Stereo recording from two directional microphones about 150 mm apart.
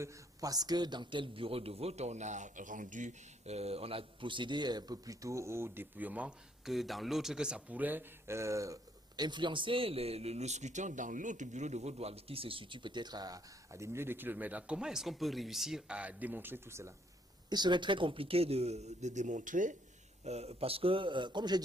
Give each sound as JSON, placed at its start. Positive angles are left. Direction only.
{"t": 0.0, "sound": "a man's voice", "side_deg": -20}
{"t": 17.5, "sound": "speech", "side_deg": -30}
{"t": 20.2, "sound": "a man's voice", "side_deg": -45}